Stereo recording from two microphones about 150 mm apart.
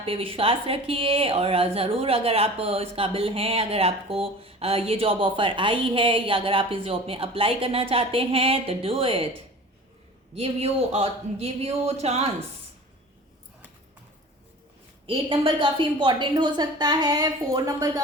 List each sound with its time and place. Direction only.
0.0 s a woman's voice: 40° right (ahead or behind)
10.3 s speech: 45° right (ahead or behind)
15.0 s a woman's voice: 35° right (ahead or behind)